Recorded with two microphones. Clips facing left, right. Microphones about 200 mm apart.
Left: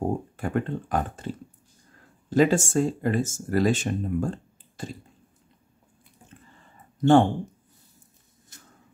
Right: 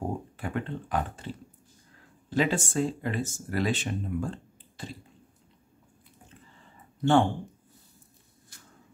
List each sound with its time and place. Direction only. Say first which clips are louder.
0.4 s speech: left 5 dB; 45° left (ahead or behind)
7.0 s speech: left 5 dB; 40° left (ahead or behind)